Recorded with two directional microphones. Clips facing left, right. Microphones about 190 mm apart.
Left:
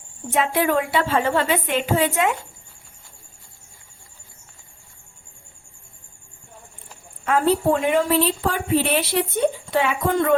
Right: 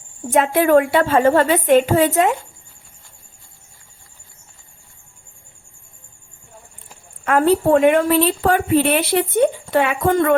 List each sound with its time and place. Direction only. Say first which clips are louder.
0.3 s a woman's voice: right 6 dB; 50° right (ahead or behind)
7.3 s a woman's voice: right 4 dB; 60° right (ahead or behind)